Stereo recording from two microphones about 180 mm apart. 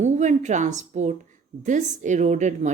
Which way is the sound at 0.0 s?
40° right (ahead or behind).